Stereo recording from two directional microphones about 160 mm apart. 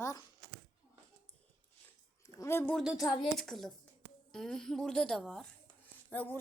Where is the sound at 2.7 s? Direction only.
5° right (ahead or behind).